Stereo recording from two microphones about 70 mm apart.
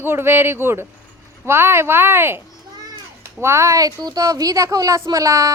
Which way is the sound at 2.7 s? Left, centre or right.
Right.